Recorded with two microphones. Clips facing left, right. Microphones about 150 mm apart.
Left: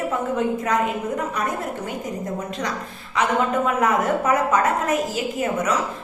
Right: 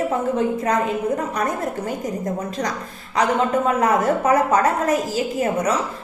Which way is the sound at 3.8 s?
35° right (ahead or behind).